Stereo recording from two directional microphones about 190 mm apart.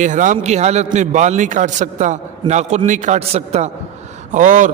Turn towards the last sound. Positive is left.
turn(degrees=-40)  # may be behind; listen again after turning